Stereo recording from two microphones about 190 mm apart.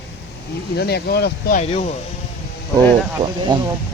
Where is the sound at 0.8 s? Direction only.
55° left (ahead or behind).